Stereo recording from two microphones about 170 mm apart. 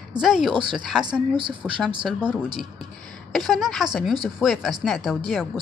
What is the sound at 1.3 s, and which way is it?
Speech, 30° right (ahead or behind).